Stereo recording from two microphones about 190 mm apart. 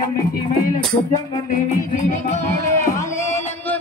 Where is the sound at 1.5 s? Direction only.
40° left (ahead or behind).